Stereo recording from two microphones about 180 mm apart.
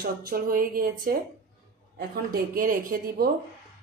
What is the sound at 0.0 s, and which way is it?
Speech, 55° right (ahead or behind).